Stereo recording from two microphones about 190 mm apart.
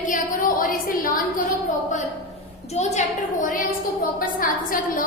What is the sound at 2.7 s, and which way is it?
A woman's voice, 35° left (ahead or behind).